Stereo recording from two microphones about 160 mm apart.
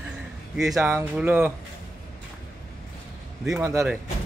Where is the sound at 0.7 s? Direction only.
15° right (ahead or behind).